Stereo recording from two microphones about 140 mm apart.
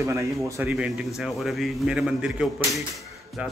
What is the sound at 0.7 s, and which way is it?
A man's voice, 10° right (ahead or behind).